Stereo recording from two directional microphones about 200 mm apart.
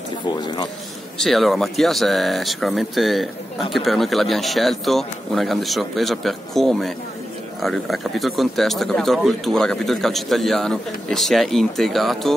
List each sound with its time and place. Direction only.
0.3 s speech: 20° left (ahead or behind)
1.2 s speech: centre (ahead or behind)